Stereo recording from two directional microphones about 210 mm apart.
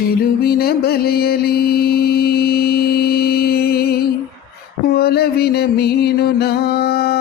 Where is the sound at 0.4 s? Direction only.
50° left (ahead or behind).